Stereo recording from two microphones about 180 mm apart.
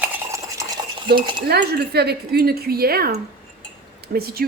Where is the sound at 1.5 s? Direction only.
65° right (ahead or behind).